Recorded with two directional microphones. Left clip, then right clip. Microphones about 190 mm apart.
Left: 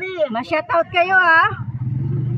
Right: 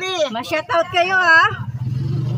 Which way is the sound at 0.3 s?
Centre (ahead or behind).